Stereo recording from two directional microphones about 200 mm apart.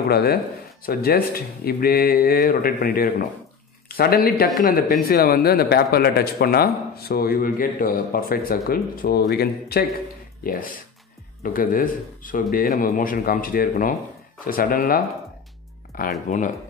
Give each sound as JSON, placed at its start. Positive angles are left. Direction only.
{"t": 0.1, "sound": "speech", "side_deg": 50}